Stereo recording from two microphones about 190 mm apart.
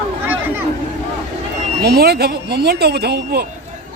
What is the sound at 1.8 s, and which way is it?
Speech, 55° right (ahead or behind).